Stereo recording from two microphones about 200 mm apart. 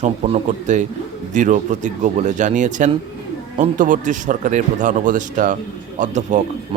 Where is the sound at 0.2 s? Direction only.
40° right (ahead or behind).